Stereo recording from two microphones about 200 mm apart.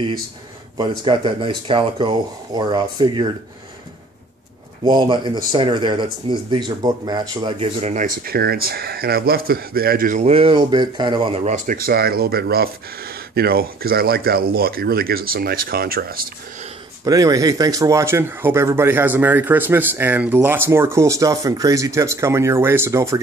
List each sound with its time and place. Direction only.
0.7 s speech: 25° right (ahead or behind)
4.8 s speech: 25° right (ahead or behind); by 16.3 s 50° right (ahead or behind)
17.0 s speech: 15° right (ahead or behind)